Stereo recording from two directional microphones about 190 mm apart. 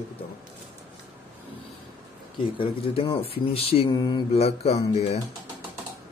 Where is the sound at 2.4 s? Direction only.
25° left (ahead or behind).